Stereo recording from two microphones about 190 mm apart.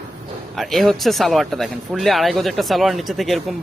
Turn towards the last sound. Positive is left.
turn(degrees=0)  # may be behind; listen again after turning